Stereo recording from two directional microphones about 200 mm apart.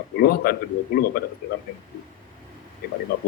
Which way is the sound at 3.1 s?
50° left (ahead or behind).